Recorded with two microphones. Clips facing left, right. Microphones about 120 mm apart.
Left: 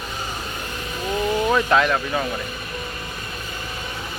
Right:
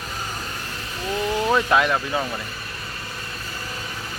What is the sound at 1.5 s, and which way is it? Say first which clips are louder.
Speech: even; 10° right (ahead or behind).